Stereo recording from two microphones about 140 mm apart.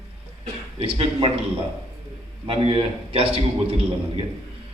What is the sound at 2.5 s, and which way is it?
A man's voice, 40° right (ahead or behind).